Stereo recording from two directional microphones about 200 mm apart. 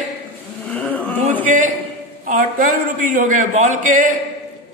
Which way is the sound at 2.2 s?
40° right (ahead or behind).